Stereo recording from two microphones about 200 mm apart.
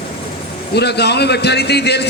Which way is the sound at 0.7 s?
55° left (ahead or behind).